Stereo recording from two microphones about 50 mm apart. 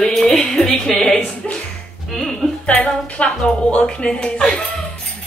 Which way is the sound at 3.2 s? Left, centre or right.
Centre.